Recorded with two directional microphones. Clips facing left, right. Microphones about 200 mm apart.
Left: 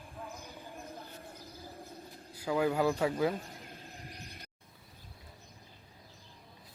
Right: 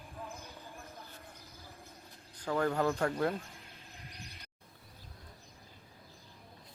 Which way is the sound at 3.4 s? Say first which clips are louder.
Left 5 dB; 40° left (ahead or behind).